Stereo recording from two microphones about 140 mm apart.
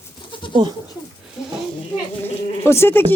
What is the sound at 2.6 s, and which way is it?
Speech, 20° left (ahead or behind).